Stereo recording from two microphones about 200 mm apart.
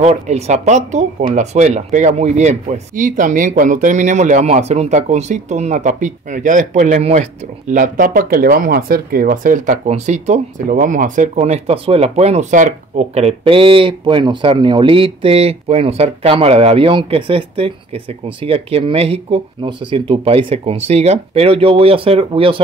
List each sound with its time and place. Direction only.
0.0 s speech: 35° right (ahead or behind)